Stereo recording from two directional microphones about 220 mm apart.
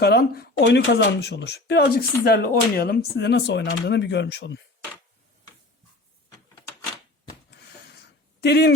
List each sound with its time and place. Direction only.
0.0 s speech: 45° left (ahead or behind)
8.4 s speech: 50° left (ahead or behind)